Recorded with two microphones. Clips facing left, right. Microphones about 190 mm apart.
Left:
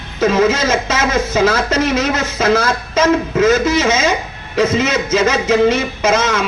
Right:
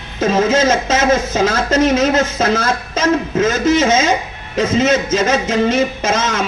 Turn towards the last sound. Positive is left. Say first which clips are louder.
# left 3 dB
turn(degrees=-45)  # may be behind; listen again after turning